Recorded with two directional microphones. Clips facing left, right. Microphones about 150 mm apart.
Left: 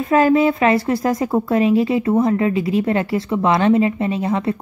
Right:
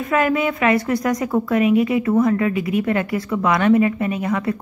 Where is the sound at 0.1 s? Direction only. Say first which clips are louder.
Left 5 dB; 30° left (ahead or behind).